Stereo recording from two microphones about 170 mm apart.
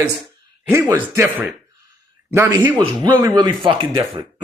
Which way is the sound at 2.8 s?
25° right (ahead or behind).